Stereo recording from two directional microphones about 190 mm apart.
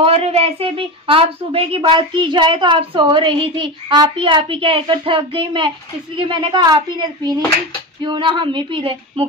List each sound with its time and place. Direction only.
0.0 s a woman's voice: 30° right (ahead or behind)